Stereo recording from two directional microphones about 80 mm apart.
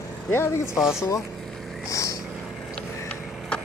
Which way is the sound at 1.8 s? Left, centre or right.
Left.